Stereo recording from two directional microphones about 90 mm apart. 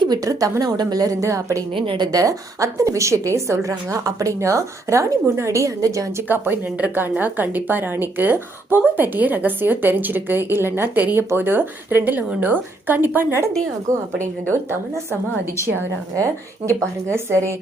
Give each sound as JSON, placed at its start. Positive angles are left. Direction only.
{"t": 0.0, "sound": "a woman's voice", "side_deg": -45}
{"t": 1.7, "sound": "a woman's voice", "side_deg": -70}
{"t": 2.1, "sound": "a woman's voice", "side_deg": -40}
{"t": 6.2, "sound": "a woman's voice", "side_deg": -20}
{"t": 16.2, "sound": "a woman's voice", "side_deg": -35}